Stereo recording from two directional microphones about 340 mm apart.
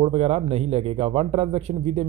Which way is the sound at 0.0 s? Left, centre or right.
Centre.